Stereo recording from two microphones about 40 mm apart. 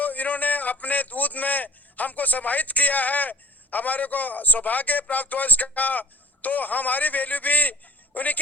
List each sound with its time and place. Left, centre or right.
0.0 s a man's voice: left